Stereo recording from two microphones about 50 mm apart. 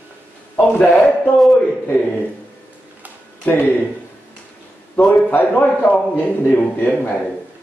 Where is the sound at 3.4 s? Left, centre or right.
Left.